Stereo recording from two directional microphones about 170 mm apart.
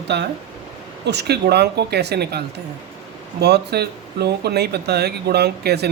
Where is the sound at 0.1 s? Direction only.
85° right.